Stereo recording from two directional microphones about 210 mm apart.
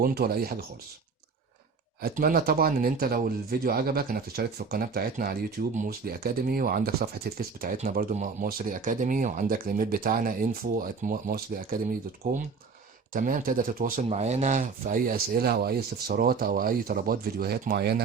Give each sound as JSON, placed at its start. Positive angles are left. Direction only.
{"t": 0.0, "sound": "speech", "side_deg": -45}
{"t": 2.0, "sound": "speech", "side_deg": -45}
{"t": 13.1, "sound": "speech", "side_deg": -40}